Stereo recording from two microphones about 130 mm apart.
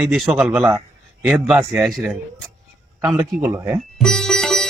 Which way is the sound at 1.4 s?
Centre (ahead or behind).